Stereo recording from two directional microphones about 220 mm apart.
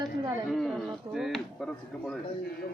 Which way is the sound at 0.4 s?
Centre (ahead or behind).